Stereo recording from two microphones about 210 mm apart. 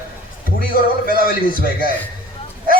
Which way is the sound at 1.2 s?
45° left (ahead or behind).